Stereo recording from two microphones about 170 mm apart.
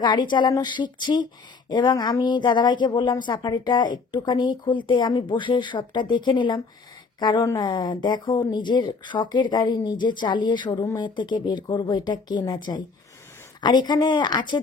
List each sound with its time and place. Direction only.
0.0 s speech: 25° left (ahead or behind)